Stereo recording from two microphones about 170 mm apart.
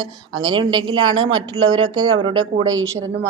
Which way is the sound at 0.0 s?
25° right (ahead or behind).